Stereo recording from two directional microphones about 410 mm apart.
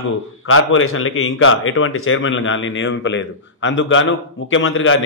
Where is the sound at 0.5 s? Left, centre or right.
Left.